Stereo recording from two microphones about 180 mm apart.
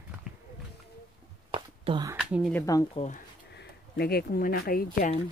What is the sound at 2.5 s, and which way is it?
Speech, 15° left (ahead or behind).